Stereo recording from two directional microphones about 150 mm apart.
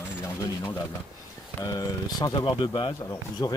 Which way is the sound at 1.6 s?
25° left (ahead or behind).